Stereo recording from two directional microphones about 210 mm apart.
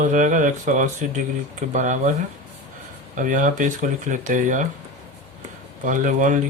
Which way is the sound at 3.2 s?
35° right (ahead or behind).